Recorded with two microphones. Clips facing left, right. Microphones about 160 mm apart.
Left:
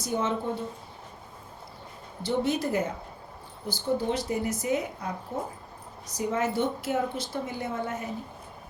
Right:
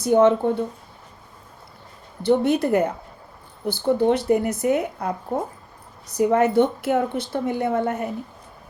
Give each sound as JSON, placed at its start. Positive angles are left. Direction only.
{"t": 0.0, "sound": "a woman's voice", "side_deg": -60}
{"t": 2.2, "sound": "a woman's voice", "side_deg": -60}